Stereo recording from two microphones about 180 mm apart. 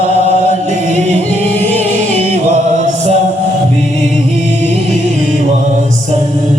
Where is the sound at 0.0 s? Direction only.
35° right (ahead or behind).